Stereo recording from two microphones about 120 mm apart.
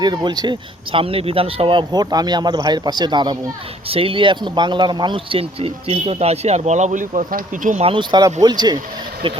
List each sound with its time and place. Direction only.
0.0 s speech: 35° right (ahead or behind)
1.9 s speech: 35° right (ahead or behind); by 7.9 s 90° right
7.9 s speech: 45° right (ahead or behind)